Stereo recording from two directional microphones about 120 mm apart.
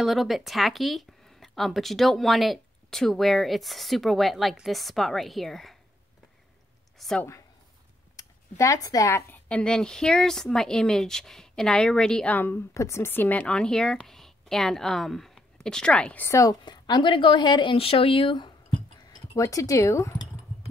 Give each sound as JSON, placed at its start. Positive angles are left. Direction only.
{"t": 0.0, "sound": "speech", "side_deg": 0}
{"t": 7.0, "sound": "speech", "side_deg": 5}
{"t": 8.2, "sound": "speech", "side_deg": 30}
{"t": 9.5, "sound": "a woman's voice", "side_deg": 5}
{"t": 16.3, "sound": "speech", "side_deg": 35}
{"t": 19.3, "sound": "speech", "side_deg": 30}